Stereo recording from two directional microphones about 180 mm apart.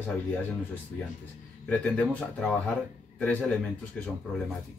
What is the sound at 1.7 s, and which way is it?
Speech, 5° left (ahead or behind).